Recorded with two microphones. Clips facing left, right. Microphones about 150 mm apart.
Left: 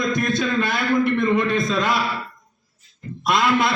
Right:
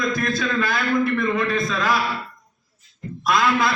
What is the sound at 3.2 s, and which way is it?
Speech, 25° left (ahead or behind).